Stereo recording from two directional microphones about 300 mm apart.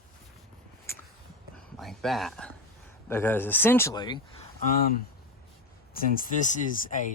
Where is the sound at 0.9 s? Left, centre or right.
Centre.